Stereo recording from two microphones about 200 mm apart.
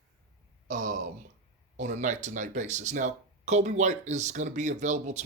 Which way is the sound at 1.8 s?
35° right (ahead or behind).